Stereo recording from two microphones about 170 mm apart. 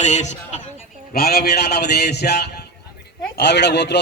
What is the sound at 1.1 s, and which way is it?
A man's voice, 65° left (ahead or behind).